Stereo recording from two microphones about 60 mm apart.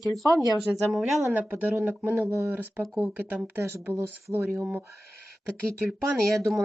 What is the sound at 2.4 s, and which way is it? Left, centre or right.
Speech, right.